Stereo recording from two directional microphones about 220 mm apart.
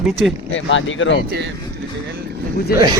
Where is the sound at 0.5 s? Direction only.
60° left (ahead or behind).